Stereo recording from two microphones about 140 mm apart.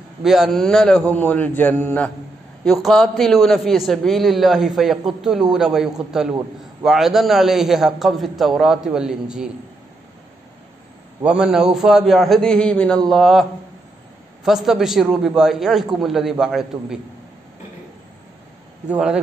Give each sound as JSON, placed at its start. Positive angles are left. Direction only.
{"t": 0.2, "sound": "a man's voice", "side_deg": -5}
{"t": 2.6, "sound": "a man's voice", "side_deg": 0}
{"t": 11.2, "sound": "a man's voice", "side_deg": -5}
{"t": 18.9, "sound": "a man's voice", "side_deg": -5}